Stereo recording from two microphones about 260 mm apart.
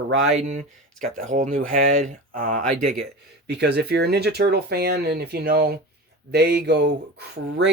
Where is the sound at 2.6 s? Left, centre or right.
Right.